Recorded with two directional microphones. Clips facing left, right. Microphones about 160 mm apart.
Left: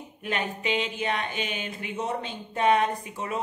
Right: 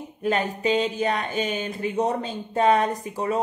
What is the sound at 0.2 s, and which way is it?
Speech, 35° right (ahead or behind).